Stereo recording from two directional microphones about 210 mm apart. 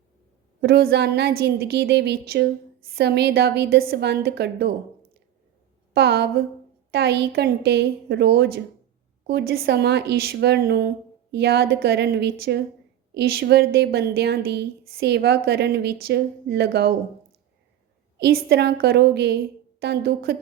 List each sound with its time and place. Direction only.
0.6 s a woman's voice: 50° right (ahead or behind)
5.9 s a woman's voice: 50° right (ahead or behind)
18.2 s a woman's voice: 50° right (ahead or behind)